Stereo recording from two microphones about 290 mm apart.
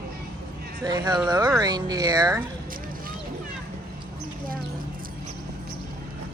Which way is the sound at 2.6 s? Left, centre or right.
Right.